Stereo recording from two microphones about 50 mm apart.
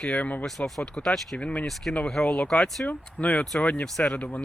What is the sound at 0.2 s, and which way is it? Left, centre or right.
Speech, left.